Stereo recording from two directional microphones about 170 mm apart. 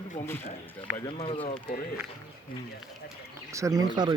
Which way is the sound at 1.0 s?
30° left (ahead or behind).